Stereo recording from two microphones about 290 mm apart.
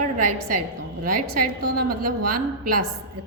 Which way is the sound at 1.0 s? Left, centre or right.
Right.